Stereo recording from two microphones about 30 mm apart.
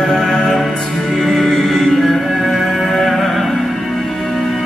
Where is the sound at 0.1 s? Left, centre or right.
Centre.